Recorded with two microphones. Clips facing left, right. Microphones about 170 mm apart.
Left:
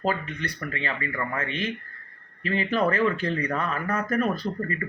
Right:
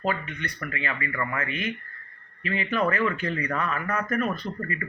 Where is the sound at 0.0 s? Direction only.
35° left (ahead or behind).